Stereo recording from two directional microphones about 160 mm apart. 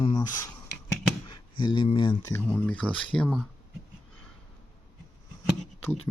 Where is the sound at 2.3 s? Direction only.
10° left (ahead or behind).